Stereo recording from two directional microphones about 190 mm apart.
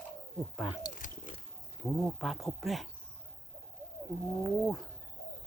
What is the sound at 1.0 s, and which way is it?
Biting, 45° left (ahead or behind).